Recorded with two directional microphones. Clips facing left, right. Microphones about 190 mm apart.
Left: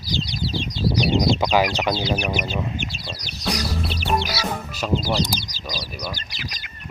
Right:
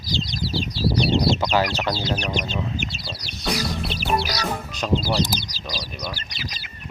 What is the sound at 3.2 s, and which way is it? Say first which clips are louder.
Music: even; centre (ahead or behind).